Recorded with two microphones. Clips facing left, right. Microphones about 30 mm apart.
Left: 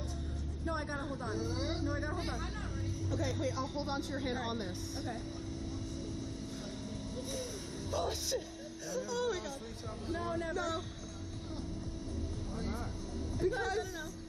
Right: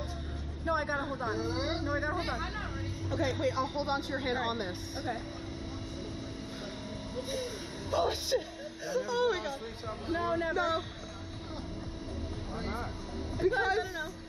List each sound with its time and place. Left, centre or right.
0.7 s speech: right
7.2 s a sound: right
7.9 s speech: right
12.5 s vehicle: right
13.4 s speech: right